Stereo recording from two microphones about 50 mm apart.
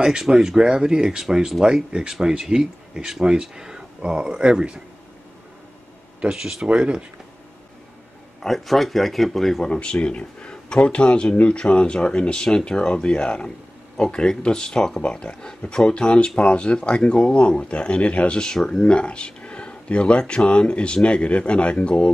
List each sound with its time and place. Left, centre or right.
0.0 s speech: centre
6.2 s speech: centre
8.4 s speech: centre
9.7 s speech: left